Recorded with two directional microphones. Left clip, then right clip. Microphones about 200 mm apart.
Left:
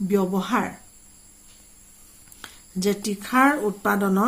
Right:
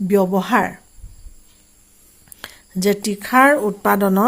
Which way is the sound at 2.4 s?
45° right (ahead or behind).